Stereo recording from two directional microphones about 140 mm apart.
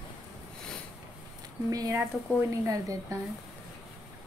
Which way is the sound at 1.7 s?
25° right (ahead or behind).